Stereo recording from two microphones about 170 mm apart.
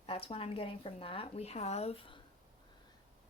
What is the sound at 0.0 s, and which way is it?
Speech, 35° left (ahead or behind).